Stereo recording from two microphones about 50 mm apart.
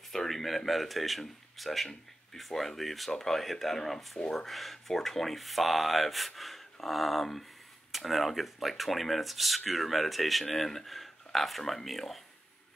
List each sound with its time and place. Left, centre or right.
0.1 s speech: centre